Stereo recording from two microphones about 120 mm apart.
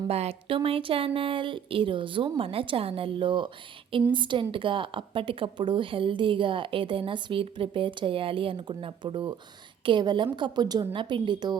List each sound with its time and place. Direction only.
0.1 s a woman's voice: 55° right (ahead or behind); by 11.5 s 40° right (ahead or behind)